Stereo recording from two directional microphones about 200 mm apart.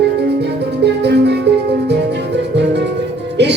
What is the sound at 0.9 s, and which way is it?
Music, 55° right (ahead or behind).